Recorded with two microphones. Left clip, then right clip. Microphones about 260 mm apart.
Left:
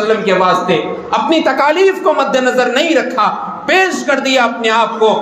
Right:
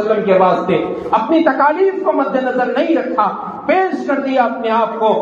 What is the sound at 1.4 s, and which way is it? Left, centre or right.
A man's voice, left.